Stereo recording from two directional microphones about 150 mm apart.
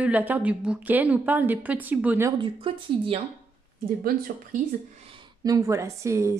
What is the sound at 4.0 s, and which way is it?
Speech, 85° right.